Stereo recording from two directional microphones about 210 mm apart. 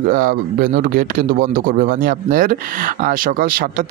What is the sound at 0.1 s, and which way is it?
A man's voice, 40° right (ahead or behind).